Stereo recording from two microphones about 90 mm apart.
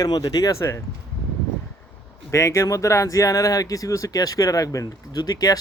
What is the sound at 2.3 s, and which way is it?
Speech, 35° left (ahead or behind).